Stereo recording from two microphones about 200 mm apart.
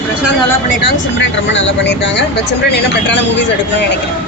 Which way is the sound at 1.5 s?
65° left (ahead or behind).